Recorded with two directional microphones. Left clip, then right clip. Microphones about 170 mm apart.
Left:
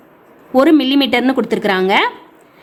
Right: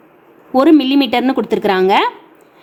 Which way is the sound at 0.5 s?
10° right (ahead or behind).